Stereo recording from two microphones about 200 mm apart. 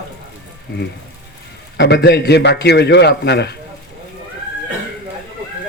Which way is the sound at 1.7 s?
60° left (ahead or behind).